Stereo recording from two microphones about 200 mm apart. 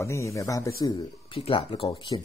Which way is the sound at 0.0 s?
15° left (ahead or behind).